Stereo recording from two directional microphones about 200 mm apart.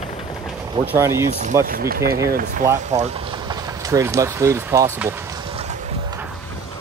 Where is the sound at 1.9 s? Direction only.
50° right (ahead or behind).